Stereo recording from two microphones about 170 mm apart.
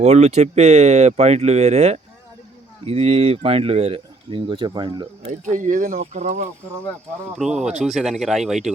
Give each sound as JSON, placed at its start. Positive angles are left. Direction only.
{"t": 0.0, "sound": "speech", "side_deg": -40}
{"t": 5.5, "sound": "speech", "side_deg": -50}
{"t": 7.3, "sound": "speech", "side_deg": -5}